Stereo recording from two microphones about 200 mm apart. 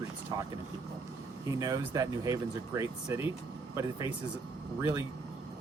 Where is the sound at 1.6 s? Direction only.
15° right (ahead or behind).